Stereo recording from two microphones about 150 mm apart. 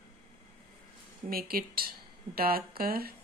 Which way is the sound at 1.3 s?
80° right.